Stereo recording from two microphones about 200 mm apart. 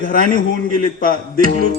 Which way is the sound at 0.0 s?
45° left (ahead or behind).